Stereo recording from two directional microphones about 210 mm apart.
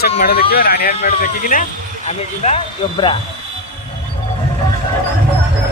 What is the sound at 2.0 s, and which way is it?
Speech, 30° left (ahead or behind).